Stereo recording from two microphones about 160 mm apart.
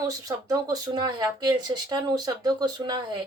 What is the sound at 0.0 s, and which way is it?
Speech, 20° right (ahead or behind).